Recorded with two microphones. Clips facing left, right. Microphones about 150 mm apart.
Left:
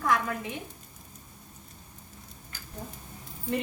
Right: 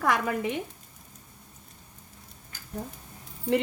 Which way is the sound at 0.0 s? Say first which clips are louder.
Right 2 dB; 90° right.